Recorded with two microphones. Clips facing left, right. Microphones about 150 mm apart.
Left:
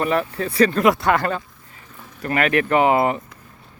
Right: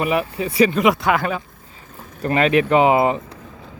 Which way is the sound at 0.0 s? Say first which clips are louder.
Right 1 dB; 10° right (ahead or behind).